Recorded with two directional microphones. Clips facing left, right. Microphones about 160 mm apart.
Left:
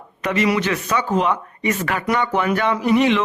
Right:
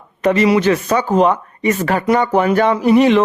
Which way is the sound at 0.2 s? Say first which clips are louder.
Right 6 dB; 35° right (ahead or behind).